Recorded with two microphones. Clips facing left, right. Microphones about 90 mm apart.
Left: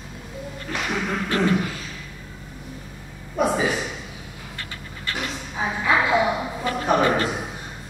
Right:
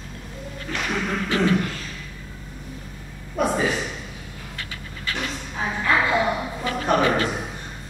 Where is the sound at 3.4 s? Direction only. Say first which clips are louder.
Left 1 dB; 5° left (ahead or behind).